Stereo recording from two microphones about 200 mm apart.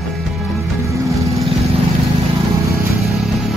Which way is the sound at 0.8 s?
15° right (ahead or behind).